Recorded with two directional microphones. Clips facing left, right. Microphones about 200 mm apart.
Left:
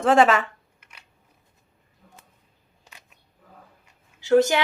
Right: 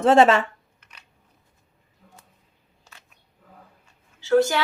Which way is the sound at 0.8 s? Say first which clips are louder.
Left 1 dB; 10° left (ahead or behind).